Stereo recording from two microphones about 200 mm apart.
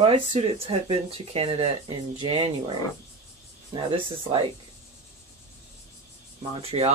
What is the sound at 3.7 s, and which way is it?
Speech, 25° right (ahead or behind).